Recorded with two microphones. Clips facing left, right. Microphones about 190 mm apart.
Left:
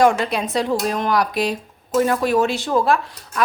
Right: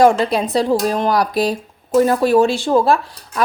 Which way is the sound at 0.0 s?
35° right (ahead or behind).